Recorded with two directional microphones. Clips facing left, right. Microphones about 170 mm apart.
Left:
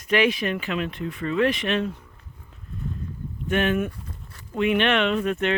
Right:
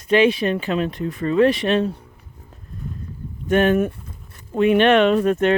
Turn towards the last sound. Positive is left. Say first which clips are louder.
# right 7 dB
turn(degrees=-45)  # may be behind; listen again after turning